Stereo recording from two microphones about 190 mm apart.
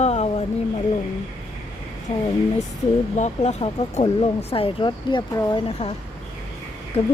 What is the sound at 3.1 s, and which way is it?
Speech, 35° left (ahead or behind).